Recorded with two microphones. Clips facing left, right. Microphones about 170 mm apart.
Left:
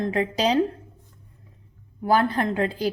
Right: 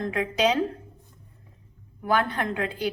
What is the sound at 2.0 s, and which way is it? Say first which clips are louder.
Speech: left 4 dB; 35° left (ahead or behind).